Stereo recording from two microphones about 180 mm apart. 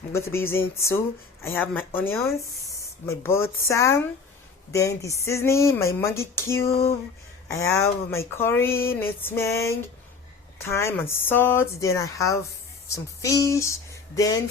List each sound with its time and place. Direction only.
0.1 s speech: 15° left (ahead or behind)